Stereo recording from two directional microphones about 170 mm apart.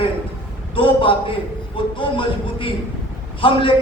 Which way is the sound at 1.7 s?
30° left (ahead or behind).